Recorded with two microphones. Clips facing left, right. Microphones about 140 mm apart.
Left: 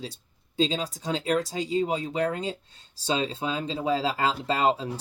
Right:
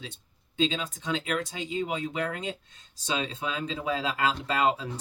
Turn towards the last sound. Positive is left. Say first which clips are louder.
# left 2 dB
turn(degrees=30)  # may be behind; listen again after turning